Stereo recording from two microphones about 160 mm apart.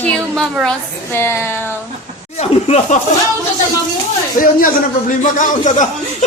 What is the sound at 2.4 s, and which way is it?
Speech, 45° left (ahead or behind).